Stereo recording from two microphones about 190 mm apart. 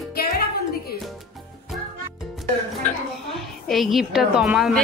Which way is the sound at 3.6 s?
Centre (ahead or behind).